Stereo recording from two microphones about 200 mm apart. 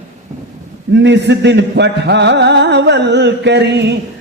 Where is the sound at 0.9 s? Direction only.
60° right (ahead or behind).